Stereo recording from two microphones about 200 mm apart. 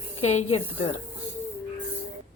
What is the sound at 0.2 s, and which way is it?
Speech, 35° left (ahead or behind).